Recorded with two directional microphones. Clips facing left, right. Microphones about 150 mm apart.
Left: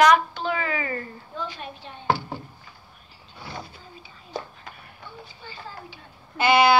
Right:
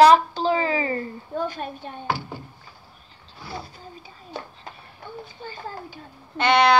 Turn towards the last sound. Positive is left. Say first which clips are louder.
# even
turn(degrees=5)  # may be behind; listen again after turning